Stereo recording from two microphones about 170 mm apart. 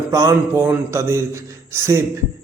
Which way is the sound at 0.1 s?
20° right (ahead or behind).